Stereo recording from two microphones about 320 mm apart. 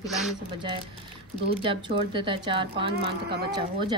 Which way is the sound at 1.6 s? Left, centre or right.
Centre.